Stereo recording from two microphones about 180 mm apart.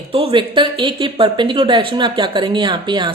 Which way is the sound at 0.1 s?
30° right (ahead or behind).